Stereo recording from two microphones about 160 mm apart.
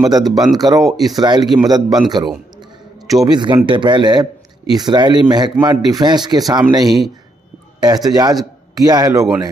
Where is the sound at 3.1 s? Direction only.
25° right (ahead or behind).